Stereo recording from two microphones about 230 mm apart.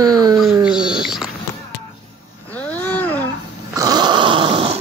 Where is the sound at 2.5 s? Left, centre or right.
Centre.